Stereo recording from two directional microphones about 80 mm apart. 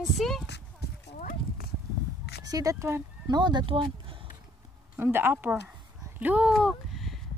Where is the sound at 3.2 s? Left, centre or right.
Right.